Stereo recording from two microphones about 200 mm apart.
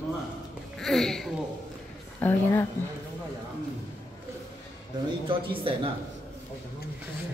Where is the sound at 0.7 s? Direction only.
Centre (ahead or behind).